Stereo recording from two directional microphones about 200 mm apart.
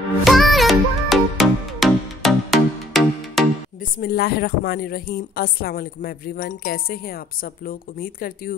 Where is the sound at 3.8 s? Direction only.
45° left (ahead or behind).